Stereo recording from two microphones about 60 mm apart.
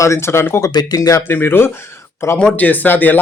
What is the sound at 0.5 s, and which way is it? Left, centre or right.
Speech, left.